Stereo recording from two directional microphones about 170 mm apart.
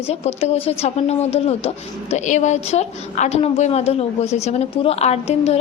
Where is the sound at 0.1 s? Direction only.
40° left (ahead or behind).